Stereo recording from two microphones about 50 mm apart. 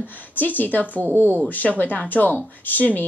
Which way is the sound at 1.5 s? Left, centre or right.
Left.